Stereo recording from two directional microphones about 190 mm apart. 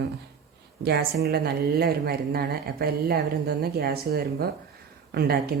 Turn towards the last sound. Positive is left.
turn(degrees=-55)  # may be behind; listen again after turning